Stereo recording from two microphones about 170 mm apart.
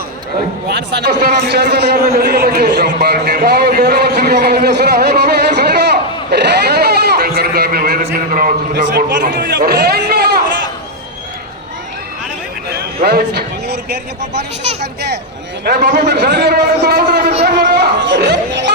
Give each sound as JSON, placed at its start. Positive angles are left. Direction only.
{"t": 0.7, "sound": "a man's voice", "side_deg": -85}
{"t": 8.4, "sound": "a sound", "side_deg": -55}
{"t": 8.8, "sound": "a man's voice", "side_deg": -90}
{"t": 13.0, "sound": "a man's voice", "side_deg": -70}
{"t": 15.6, "sound": "a man's voice", "side_deg": -70}
{"t": 17.4, "sound": "chatter", "side_deg": -70}